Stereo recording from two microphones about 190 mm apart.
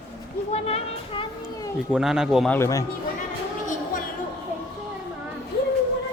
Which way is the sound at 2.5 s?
15° left (ahead or behind).